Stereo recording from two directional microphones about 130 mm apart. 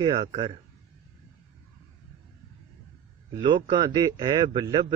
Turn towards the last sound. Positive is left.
turn(degrees=-35)  # may be behind; listen again after turning